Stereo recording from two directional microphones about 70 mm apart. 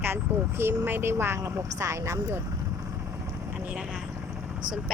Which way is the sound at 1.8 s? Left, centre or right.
Right.